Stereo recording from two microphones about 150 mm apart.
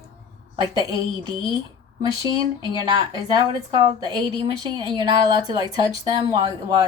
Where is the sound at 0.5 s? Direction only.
25° right (ahead or behind).